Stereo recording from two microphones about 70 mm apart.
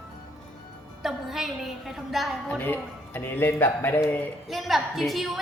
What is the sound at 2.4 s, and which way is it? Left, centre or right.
A man's voice, left.